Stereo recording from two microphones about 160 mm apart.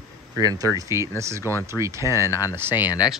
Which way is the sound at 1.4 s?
15° left (ahead or behind).